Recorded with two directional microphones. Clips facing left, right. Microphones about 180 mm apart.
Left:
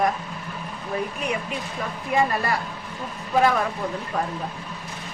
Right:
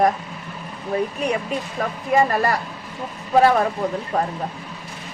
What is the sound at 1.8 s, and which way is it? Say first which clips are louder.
Speech: right 6 dB; 50° right (ahead or behind).